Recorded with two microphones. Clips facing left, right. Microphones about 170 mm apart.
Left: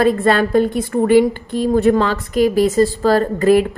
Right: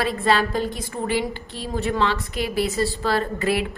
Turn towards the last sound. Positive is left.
turn(degrees=45)  # may be behind; listen again after turning